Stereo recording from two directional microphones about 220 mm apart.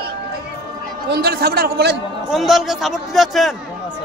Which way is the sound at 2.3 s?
Centre (ahead or behind).